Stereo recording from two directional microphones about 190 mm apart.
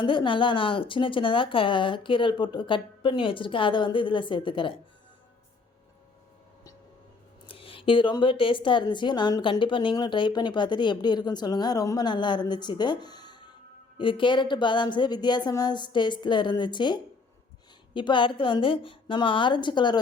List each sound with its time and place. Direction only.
0.0 s a woman's voice: 25° left (ahead or behind)
7.4 s a woman's voice: 30° left (ahead or behind)